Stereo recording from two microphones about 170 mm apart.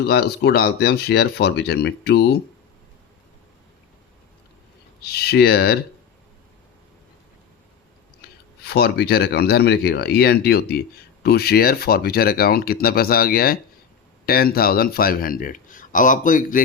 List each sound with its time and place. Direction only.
0.0 s speech: 70° left (ahead or behind)
5.1 s speech: 70° left (ahead or behind)
8.6 s speech: 70° left (ahead or behind); by 16.6 s 50° left (ahead or behind)